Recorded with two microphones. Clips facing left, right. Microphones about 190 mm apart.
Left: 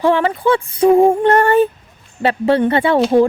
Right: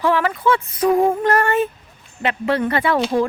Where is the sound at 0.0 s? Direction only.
30° left (ahead or behind).